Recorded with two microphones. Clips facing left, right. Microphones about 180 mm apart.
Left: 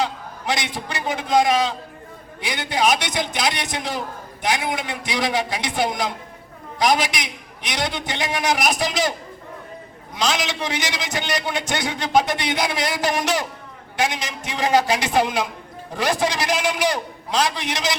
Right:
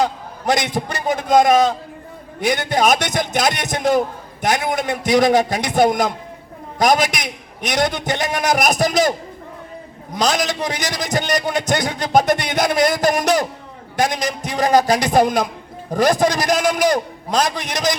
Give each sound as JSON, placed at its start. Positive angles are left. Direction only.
{"t": 0.0, "sound": "a man's voice", "side_deg": -40}